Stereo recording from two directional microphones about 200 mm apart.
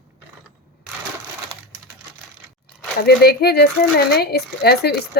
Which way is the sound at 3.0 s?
55° left (ahead or behind).